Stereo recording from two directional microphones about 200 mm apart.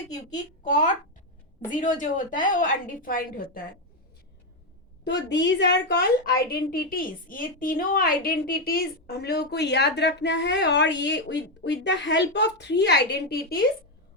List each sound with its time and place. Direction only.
0.6 s a woman's voice: 40° left (ahead or behind)
5.0 s a woman's voice: 60° left (ahead or behind)